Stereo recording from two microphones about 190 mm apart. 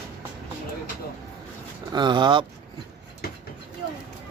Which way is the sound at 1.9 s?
25° right (ahead or behind).